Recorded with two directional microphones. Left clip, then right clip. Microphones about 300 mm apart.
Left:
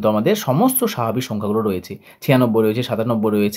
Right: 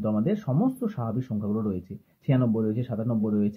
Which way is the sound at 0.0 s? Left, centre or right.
Left.